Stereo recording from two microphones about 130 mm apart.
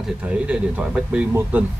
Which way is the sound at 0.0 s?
10° right (ahead or behind).